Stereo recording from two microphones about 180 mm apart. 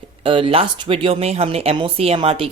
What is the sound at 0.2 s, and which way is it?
Speech, 30° right (ahead or behind).